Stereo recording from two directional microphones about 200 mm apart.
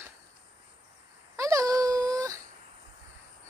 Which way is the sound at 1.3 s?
15° right (ahead or behind).